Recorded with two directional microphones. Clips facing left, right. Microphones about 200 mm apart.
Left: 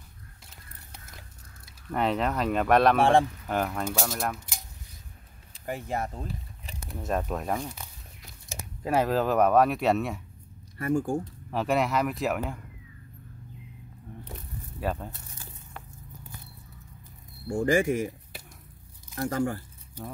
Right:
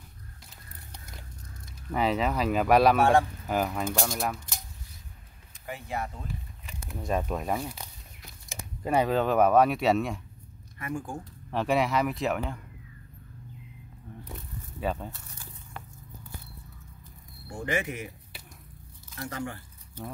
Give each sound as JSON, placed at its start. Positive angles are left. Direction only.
{"t": 1.9, "sound": "speech", "side_deg": 0}
{"t": 3.0, "sound": "speech", "side_deg": 30}
{"t": 3.4, "sound": "speech", "side_deg": -5}
{"t": 5.7, "sound": "speech", "side_deg": 45}
{"t": 7.0, "sound": "speech", "side_deg": 0}
{"t": 8.5, "sound": "a sound", "side_deg": 35}
{"t": 8.8, "sound": "speech", "side_deg": 0}
{"t": 10.8, "sound": "speech", "side_deg": 45}
{"t": 11.5, "sound": "speech", "side_deg": 0}
{"t": 14.8, "sound": "speech", "side_deg": 0}
{"t": 17.5, "sound": "speech", "side_deg": 45}